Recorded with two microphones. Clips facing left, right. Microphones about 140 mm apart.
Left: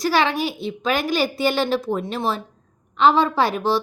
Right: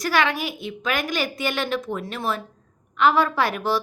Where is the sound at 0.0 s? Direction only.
30° left (ahead or behind).